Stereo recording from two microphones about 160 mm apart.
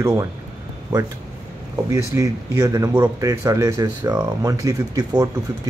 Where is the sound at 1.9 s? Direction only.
20° right (ahead or behind).